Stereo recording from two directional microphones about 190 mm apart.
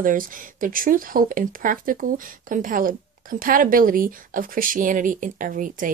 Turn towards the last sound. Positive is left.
turn(degrees=-45)  # may be behind; listen again after turning